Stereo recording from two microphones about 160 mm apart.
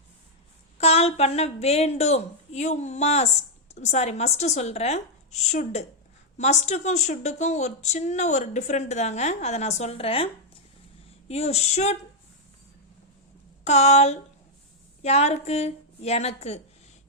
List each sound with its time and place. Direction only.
0.8 s a woman's voice: 40° left (ahead or behind)
13.7 s a woman's voice: 45° left (ahead or behind)